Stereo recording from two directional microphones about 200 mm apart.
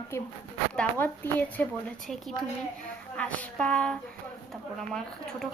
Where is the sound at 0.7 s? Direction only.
5° left (ahead or behind).